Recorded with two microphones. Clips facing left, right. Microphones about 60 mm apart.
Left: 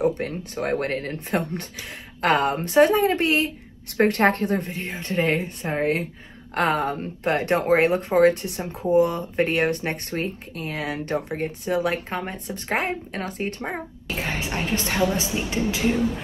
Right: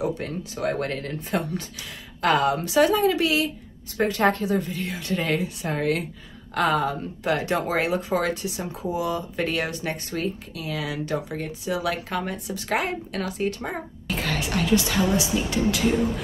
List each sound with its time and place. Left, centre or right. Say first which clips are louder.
0.0 s a woman's voice: left 4 dB; left
3.9 s speech: left 2 dB; left
4.8 s a woman's voice: left 3 dB; left
13.7 s cough: even; centre
14.2 s a sound: right 1 dB; left
15.1 s a woman's voice: right 2 dB; left